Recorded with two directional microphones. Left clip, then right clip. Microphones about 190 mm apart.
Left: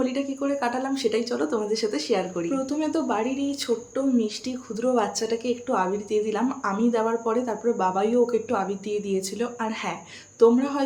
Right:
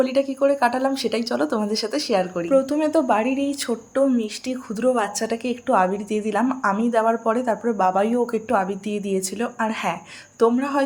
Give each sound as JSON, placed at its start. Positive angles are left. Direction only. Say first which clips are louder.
{"t": 0.0, "sound": "a woman's voice", "louder": "right 8 dB", "side_deg": -45}